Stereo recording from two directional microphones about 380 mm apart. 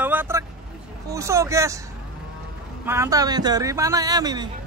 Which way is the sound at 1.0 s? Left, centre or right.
Centre.